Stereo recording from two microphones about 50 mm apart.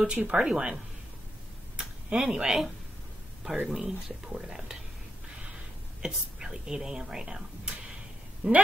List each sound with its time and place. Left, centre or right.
0.0 s speech: right
2.0 s speech: centre
6.0 s speech: centre